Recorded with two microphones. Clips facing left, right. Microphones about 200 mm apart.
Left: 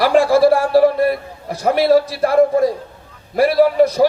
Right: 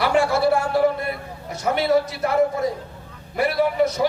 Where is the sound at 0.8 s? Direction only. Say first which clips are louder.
Left 7 dB; 80° left.